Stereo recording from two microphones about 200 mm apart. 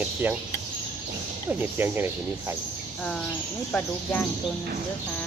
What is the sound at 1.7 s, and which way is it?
Speech, 10° right (ahead or behind).